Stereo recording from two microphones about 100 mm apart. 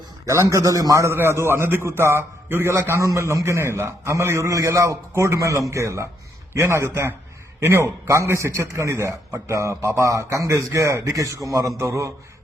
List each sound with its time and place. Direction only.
0.5 s a man's voice: 35° right (ahead or behind)